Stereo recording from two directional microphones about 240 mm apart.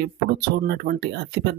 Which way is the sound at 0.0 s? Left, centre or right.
Right.